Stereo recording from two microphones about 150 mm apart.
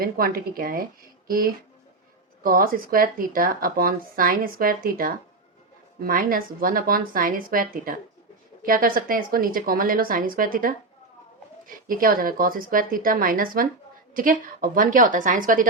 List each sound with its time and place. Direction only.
0.0 s a woman's voice: 75° right (ahead or behind)
2.4 s a woman's voice: 70° right (ahead or behind)
11.9 s a woman's voice: 70° right (ahead or behind)